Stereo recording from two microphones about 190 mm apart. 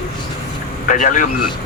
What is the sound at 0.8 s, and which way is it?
Speech, 45° left (ahead or behind).